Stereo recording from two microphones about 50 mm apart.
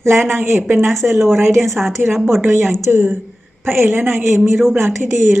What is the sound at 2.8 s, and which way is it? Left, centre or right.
A woman's voice, right.